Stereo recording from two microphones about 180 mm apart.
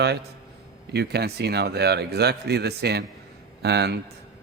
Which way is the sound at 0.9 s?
65° right (ahead or behind).